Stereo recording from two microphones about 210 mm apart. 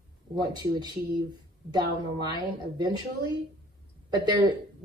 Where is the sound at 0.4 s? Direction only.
20° right (ahead or behind).